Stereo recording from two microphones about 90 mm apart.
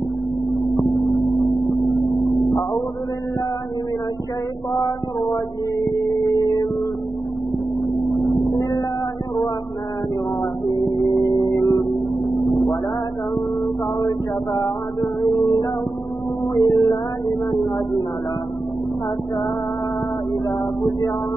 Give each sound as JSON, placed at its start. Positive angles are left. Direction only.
{"t": 5.3, "sound": "music", "side_deg": 50}
{"t": 8.1, "sound": "vehicle", "side_deg": 0}
{"t": 10.7, "sound": "music", "side_deg": 55}
{"t": 11.3, "sound": "a sound", "side_deg": 50}
{"t": 12.4, "sound": "vehicle", "side_deg": 5}
{"t": 13.9, "sound": "a sound", "side_deg": 50}
{"t": 16.5, "sound": "music", "side_deg": 55}